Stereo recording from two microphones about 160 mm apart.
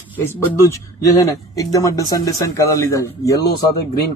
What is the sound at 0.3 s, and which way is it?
A man's voice, 20° left (ahead or behind).